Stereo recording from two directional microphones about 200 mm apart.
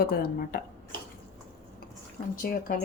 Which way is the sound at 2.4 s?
45° left (ahead or behind).